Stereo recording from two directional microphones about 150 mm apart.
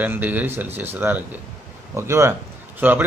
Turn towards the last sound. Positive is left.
turn(degrees=-10)  # may be behind; listen again after turning